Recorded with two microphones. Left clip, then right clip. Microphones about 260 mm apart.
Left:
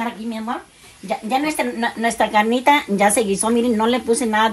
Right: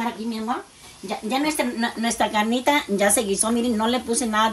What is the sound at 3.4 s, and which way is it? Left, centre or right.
Speech, centre.